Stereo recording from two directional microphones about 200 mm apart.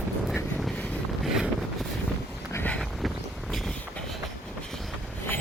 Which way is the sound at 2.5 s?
10° left (ahead or behind).